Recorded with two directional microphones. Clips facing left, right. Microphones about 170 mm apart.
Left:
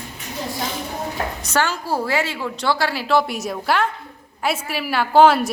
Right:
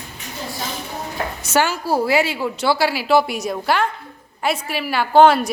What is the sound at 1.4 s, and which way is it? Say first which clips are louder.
A woman's voice: right 4 dB; 10° right (ahead or behind).